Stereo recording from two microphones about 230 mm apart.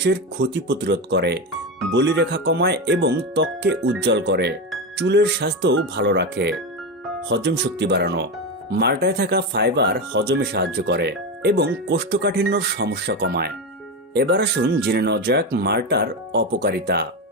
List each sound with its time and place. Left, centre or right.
0.0 s speech: right